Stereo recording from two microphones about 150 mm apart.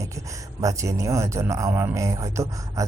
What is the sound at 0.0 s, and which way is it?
Speech, 20° right (ahead or behind).